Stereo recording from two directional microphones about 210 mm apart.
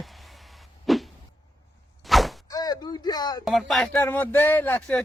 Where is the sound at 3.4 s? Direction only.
Centre (ahead or behind).